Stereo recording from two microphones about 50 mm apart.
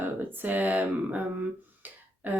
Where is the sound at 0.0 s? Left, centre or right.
Right.